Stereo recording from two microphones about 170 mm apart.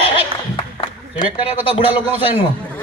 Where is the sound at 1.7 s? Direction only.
35° left (ahead or behind).